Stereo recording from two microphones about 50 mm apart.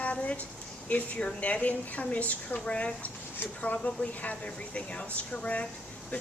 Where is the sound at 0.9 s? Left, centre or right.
Left.